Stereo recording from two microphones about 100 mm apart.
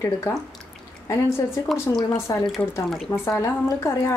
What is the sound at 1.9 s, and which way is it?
A woman's voice, 35° left (ahead or behind).